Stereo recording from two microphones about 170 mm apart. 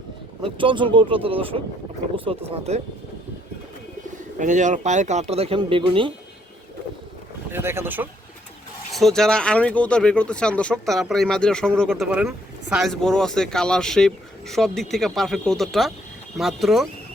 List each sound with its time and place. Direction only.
0.4 s speech: 30° right (ahead or behind)
4.4 s speech: 45° right (ahead or behind); by 6.1 s 30° right (ahead or behind)
7.5 s speech: 15° right (ahead or behind)
8.9 s speech: centre (ahead or behind)